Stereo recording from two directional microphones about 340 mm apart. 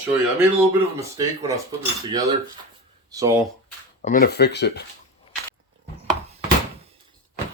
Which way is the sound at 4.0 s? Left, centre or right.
Left.